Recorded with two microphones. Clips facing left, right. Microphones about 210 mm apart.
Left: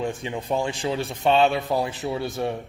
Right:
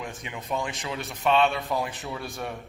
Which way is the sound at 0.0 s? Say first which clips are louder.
Left 9 dB; 30° left (ahead or behind).